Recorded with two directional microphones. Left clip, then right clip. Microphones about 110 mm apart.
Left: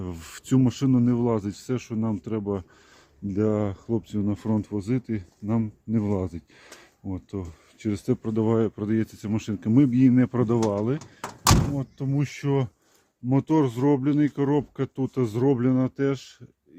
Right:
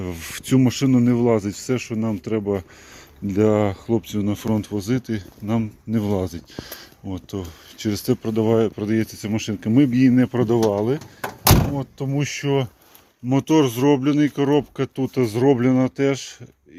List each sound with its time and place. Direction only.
0.0 s speech: 25° left (ahead or behind)
3.2 s speech: 5° left (ahead or behind)
3.8 s speech: 25° left (ahead or behind); by 12.6 s 40° left (ahead or behind)
13.5 s speech: 25° left (ahead or behind)